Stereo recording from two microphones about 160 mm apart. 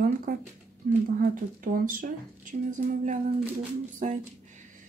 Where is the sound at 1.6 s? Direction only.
60° right (ahead or behind).